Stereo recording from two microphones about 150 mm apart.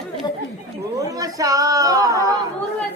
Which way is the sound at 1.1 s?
20° right (ahead or behind).